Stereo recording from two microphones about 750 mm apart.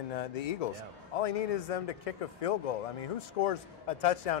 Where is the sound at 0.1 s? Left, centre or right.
Left.